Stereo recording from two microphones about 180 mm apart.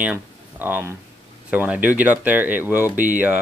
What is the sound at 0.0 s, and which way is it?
Speech, 10° right (ahead or behind).